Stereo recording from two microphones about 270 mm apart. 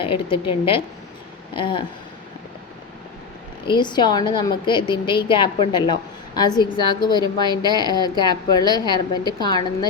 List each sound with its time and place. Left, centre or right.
0.0 s a woman's voice: centre
3.7 s a woman's voice: centre